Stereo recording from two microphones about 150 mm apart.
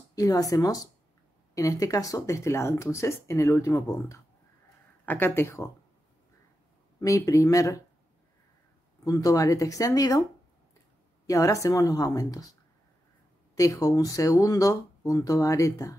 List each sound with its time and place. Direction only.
0.1 s speech: 25° left (ahead or behind)
7.0 s speech: 20° left (ahead or behind)
9.0 s speech: 25° left (ahead or behind)
11.2 s speech: 25° left (ahead or behind)
13.6 s speech: 25° left (ahead or behind)